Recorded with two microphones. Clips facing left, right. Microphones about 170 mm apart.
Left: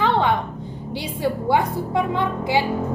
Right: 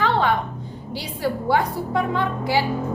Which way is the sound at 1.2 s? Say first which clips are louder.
Left 1 dB; 20° left (ahead or behind).